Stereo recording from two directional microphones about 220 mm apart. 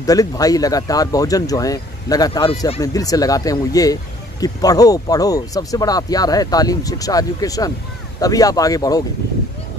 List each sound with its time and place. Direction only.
0.0 s speech: 15° left (ahead or behind)